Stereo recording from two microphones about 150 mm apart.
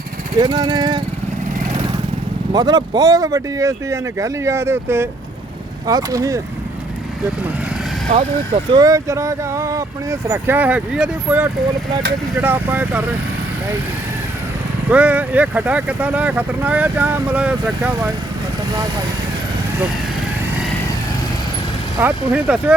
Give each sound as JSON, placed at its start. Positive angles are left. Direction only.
{"t": 0.3, "sound": "speech", "side_deg": -30}
{"t": 2.5, "sound": "speech", "side_deg": -30}
{"t": 8.7, "sound": "speech", "side_deg": -25}
{"t": 14.8, "sound": "speech", "side_deg": -10}
{"t": 22.0, "sound": "speech", "side_deg": -10}